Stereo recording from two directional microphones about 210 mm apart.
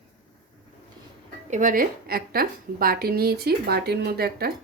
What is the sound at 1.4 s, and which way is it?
A woman's voice, 35° right (ahead or behind).